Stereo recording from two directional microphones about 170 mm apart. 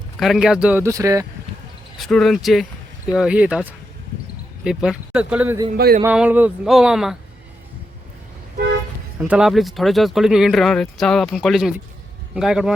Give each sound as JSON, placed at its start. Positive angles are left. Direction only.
{"t": 0.2, "sound": "speech", "side_deg": 0}
{"t": 2.0, "sound": "speech", "side_deg": 0}
{"t": 5.7, "sound": "a sound", "side_deg": -60}
{"t": 6.0, "sound": "speech", "side_deg": -10}
{"t": 9.1, "sound": "speech", "side_deg": -10}